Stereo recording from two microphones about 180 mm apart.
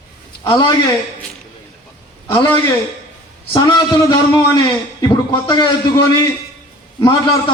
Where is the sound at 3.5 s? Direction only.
25° left (ahead or behind).